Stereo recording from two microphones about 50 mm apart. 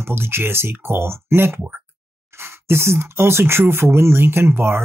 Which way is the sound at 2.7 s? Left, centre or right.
Right.